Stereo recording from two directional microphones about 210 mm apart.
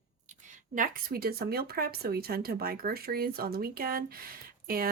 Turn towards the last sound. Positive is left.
turn(degrees=-45)  # may be behind; listen again after turning